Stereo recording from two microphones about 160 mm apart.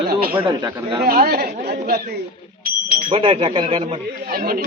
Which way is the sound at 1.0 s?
70° right (ahead or behind).